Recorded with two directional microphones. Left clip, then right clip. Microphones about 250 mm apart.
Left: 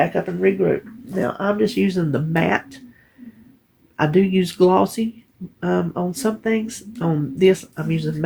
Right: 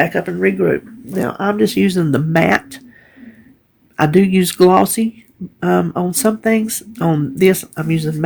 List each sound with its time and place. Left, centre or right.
0.0 s speech: right
3.9 s speech: right